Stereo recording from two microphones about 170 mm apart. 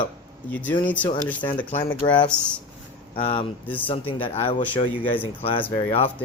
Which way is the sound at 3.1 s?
30° left (ahead or behind).